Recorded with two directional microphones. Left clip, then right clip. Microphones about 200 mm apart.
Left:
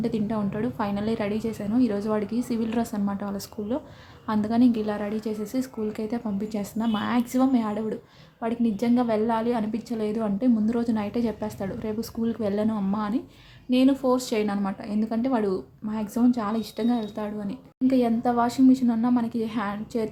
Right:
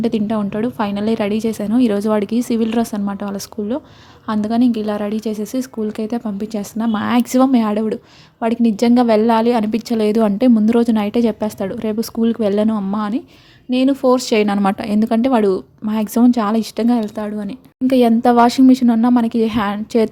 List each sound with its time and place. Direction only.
0.0 s a woman's voice: 35° right (ahead or behind)